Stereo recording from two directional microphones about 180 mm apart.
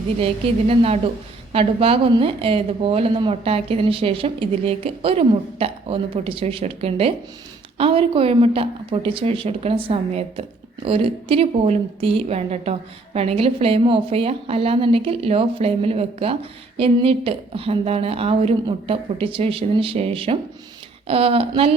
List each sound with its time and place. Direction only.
0.2 s a woman's voice: 30° right (ahead or behind)